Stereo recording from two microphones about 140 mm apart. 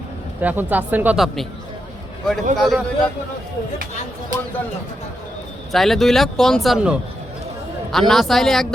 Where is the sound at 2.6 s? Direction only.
Centre (ahead or behind).